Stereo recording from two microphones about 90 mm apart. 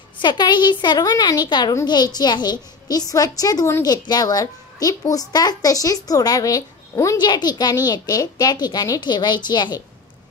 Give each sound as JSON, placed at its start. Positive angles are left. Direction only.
{"t": 0.2, "sound": "a child's voice", "side_deg": 55}
{"t": 7.2, "sound": "a child's voice", "side_deg": 50}